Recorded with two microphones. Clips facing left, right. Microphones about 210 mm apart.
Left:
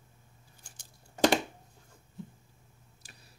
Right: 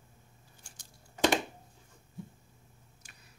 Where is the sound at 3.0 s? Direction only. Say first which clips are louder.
Left 5 dB; 35° left (ahead or behind).